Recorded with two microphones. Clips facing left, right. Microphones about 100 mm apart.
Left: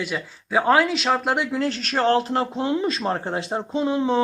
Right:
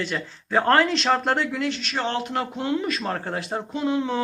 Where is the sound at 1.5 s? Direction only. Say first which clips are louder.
Left 3 dB; 35° left (ahead or behind).